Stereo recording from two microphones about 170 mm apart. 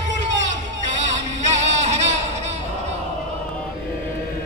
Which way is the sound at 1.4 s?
40° right (ahead or behind).